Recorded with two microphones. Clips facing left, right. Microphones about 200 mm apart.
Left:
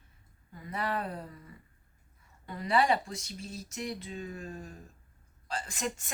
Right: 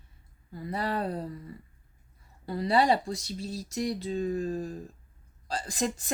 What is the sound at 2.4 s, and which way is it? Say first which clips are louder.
A woman's voice: right 3 dB; 35° right (ahead or behind).